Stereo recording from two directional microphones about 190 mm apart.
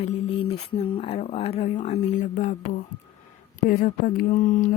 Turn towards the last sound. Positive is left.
turn(degrees=45)  # may be behind; listen again after turning